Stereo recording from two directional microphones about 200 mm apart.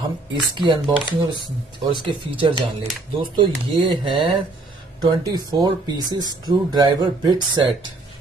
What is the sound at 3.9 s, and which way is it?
Speech, 25° right (ahead or behind).